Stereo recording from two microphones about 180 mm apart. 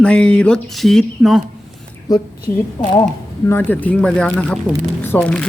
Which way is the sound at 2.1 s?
20° left (ahead or behind).